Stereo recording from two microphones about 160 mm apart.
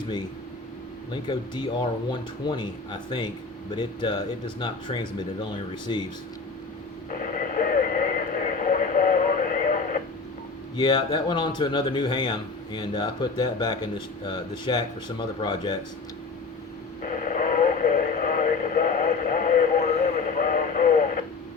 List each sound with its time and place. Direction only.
1.1 s a man's voice: 30° left (ahead or behind)
3.7 s a man's voice: 30° left (ahead or behind)
7.1 s radio: 60° left (ahead or behind)
10.8 s a man's voice: 30° left (ahead or behind)
17.0 s radio: 55° left (ahead or behind)